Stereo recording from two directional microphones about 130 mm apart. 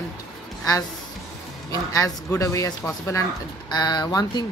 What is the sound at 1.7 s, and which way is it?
Speech, 25° left (ahead or behind).